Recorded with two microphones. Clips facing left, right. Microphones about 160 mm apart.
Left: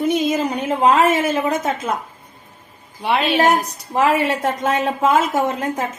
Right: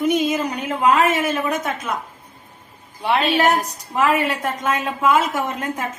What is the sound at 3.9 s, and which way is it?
Speech, 30° left (ahead or behind).